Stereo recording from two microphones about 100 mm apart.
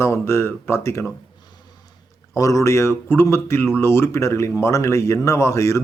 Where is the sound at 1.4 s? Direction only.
45° left (ahead or behind).